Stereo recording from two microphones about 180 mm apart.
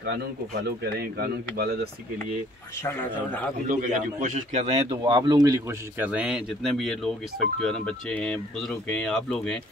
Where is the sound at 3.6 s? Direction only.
45° right (ahead or behind); by 5.8 s 20° right (ahead or behind).